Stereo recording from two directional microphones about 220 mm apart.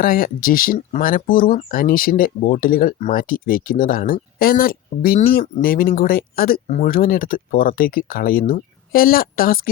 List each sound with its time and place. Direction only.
0.0 s speech: 40° left (ahead or behind)